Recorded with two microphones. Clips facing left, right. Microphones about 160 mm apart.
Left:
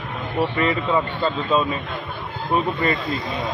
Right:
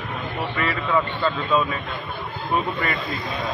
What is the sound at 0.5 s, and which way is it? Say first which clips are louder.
Speech: even; 20° left (ahead or behind).